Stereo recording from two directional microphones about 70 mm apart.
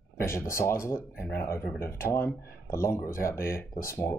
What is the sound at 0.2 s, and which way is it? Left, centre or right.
Speech, left.